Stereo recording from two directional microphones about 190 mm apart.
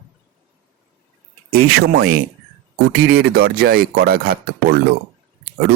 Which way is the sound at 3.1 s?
55° right (ahead or behind).